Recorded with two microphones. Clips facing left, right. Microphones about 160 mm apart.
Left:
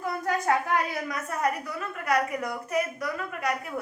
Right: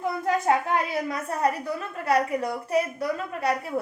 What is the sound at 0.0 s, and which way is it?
A woman's voice, 25° right (ahead or behind).